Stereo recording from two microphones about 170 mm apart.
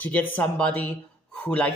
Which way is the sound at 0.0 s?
10° left (ahead or behind).